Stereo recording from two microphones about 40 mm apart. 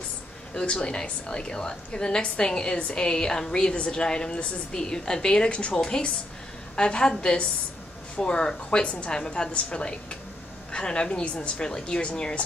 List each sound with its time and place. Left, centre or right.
0.6 s a woman's voice: left